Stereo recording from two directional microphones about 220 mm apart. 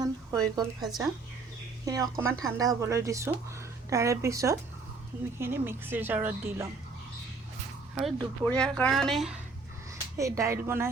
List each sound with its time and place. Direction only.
0.0 s a sound: 15° right (ahead or behind)
0.8 s a woman's voice: centre (ahead or behind)
1.8 s a woman's voice: 15° right (ahead or behind)
8.0 s a woman's voice: centre (ahead or behind)
10.2 s a woman's voice: 15° right (ahead or behind)